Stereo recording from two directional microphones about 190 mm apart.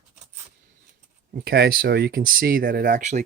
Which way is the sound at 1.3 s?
60° right (ahead or behind).